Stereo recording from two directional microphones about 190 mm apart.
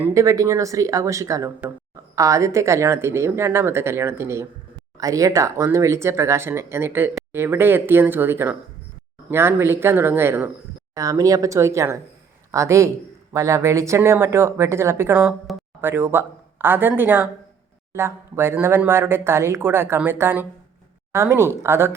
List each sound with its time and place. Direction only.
0.0 s speech: 15° right (ahead or behind)